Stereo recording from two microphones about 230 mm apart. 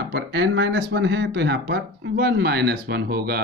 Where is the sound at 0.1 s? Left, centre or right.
Right.